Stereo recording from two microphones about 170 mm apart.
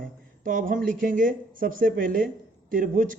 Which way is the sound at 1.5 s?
55° right (ahead or behind).